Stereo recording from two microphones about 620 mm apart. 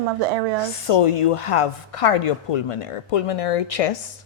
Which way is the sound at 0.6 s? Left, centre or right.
Left.